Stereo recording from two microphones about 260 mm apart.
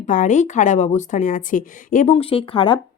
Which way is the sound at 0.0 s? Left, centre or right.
Left.